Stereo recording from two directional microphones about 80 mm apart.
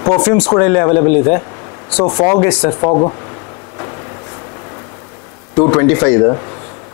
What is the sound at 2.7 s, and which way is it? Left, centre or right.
Speech, left.